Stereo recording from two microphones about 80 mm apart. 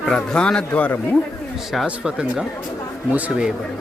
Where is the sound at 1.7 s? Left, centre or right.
Centre.